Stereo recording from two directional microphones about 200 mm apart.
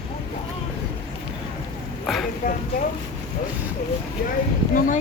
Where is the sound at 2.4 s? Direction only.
45° left (ahead or behind).